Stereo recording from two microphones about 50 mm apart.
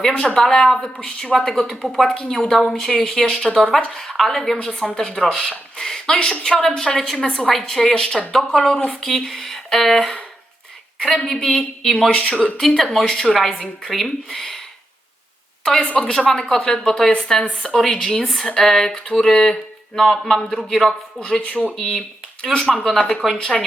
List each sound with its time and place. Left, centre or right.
0.0 s a man's voice: centre
1.4 s a man's voice: centre
2.5 s a man's voice: centre
3.8 s speech: left
4.2 s speech: centre
6.1 s speech: left
6.4 s a man's voice: centre
9.0 s speech: centre
11.2 s a man's voice: centre
12.1 s speech: left
12.5 s a man's voice: centre
15.6 s a man's voice: centre